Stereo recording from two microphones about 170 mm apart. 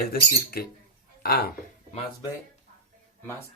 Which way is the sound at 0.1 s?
65° left (ahead or behind).